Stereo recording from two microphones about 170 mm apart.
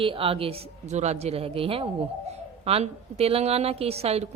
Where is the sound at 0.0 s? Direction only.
30° right (ahead or behind).